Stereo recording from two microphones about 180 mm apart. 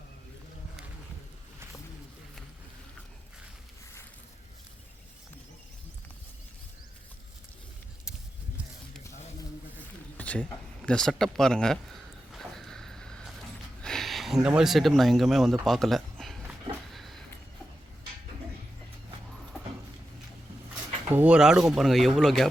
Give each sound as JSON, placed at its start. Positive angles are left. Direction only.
{"t": 10.2, "sound": "speech", "side_deg": 5}
{"t": 12.3, "sound": "vehicle", "side_deg": 0}
{"t": 13.8, "sound": "speech", "side_deg": 0}
{"t": 16.4, "sound": "a sound", "side_deg": 0}
{"t": 21.1, "sound": "speech", "side_deg": -10}